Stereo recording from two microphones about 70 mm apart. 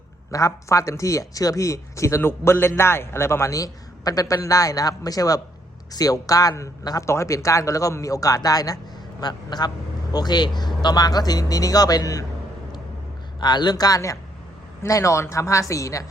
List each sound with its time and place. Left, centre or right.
0.3 s a man's voice: left
9.2 s a man's voice: left
10.8 s a man's voice: left
13.4 s a man's voice: left